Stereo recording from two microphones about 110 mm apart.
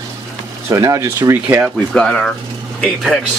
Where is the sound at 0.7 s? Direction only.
25° right (ahead or behind).